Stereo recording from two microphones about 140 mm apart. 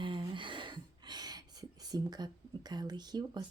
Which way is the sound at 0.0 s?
35° right (ahead or behind).